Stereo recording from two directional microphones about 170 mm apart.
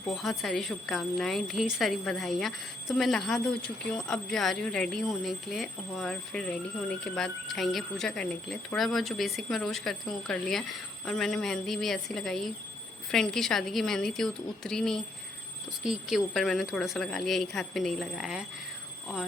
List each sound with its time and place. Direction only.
0.1 s a woman's voice: centre (ahead or behind)